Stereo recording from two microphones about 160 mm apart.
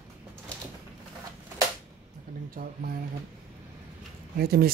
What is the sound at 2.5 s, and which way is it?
Speech, 65° right (ahead or behind).